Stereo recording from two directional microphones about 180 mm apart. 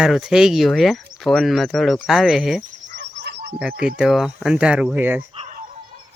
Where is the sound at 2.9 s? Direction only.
75° right (ahead or behind).